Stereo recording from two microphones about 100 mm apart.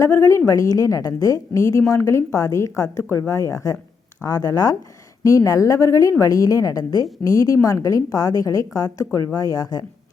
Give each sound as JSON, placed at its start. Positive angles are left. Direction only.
{"t": 0.0, "sound": "a woman's voice", "side_deg": 30}